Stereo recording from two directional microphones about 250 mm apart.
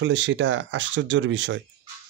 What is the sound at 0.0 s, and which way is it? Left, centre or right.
Speech, right.